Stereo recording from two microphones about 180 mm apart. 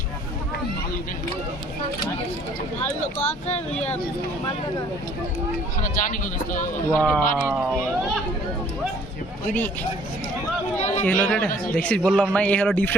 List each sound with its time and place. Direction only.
3.2 s speech: 40° left (ahead or behind)
5.8 s a man's voice: 45° left (ahead or behind)
7.0 s speech: 5° left (ahead or behind)
10.8 s speech: 40° left (ahead or behind)
11.0 s a man's voice: 10° left (ahead or behind)